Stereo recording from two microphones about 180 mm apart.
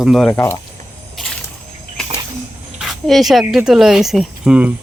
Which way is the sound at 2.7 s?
Centre (ahead or behind).